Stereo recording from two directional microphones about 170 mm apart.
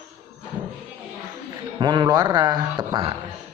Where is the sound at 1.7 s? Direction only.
25° right (ahead or behind).